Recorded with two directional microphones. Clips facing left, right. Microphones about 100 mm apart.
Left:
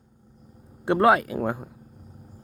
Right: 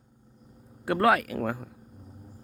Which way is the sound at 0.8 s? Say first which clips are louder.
Left 4 dB; 25° left (ahead or behind).